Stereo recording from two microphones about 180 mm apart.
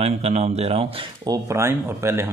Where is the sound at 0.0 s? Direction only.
35° right (ahead or behind).